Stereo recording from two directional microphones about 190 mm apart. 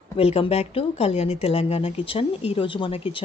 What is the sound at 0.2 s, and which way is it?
Speech, 30° left (ahead or behind).